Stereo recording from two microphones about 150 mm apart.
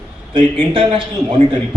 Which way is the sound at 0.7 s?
35° right (ahead or behind).